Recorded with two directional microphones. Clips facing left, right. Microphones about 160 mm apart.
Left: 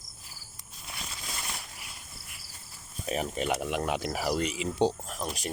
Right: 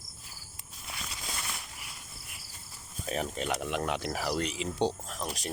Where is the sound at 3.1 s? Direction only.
10° left (ahead or behind).